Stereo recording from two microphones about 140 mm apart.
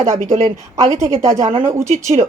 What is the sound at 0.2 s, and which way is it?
Speech, 55° right (ahead or behind).